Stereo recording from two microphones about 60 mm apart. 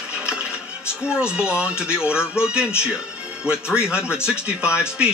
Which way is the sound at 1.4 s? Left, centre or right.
Centre.